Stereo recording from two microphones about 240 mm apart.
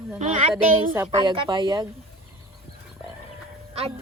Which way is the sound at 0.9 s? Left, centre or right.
Centre.